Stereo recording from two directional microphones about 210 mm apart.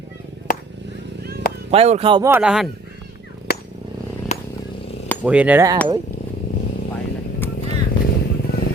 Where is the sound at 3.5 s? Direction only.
50° left (ahead or behind).